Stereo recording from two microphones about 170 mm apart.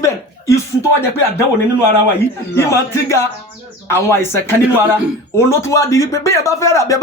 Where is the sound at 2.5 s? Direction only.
15° left (ahead or behind).